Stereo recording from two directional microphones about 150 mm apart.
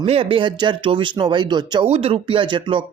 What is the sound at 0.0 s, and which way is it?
Speech, 40° right (ahead or behind).